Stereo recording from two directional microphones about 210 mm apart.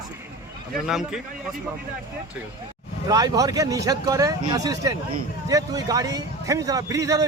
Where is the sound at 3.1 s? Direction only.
15° right (ahead or behind).